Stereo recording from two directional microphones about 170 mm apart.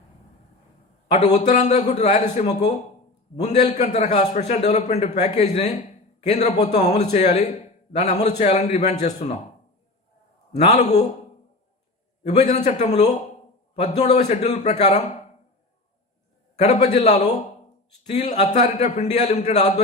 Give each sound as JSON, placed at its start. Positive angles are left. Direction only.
{"t": 1.0, "sound": "a man's voice", "side_deg": 40}
{"t": 10.5, "sound": "a man's voice", "side_deg": 40}
{"t": 12.2, "sound": "a man's voice", "side_deg": 40}
{"t": 16.6, "sound": "a man's voice", "side_deg": 40}